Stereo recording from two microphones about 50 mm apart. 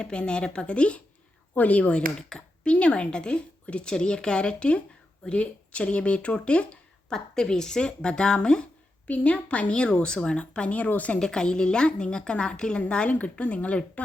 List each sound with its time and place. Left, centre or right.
0.0 s speech: centre
7.1 s speech: centre
9.0 s speech: left
11.2 s speech: centre
13.1 s speech: left